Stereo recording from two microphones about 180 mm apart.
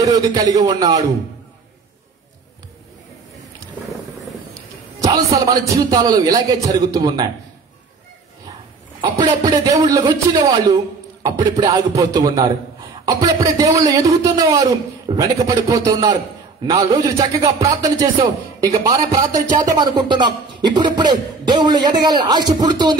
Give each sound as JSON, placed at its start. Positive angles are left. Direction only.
{"t": 0.0, "sound": "a man's voice", "side_deg": -20}
{"t": 5.0, "sound": "a man's voice", "side_deg": -20}
{"t": 9.0, "sound": "a man's voice", "side_deg": -20}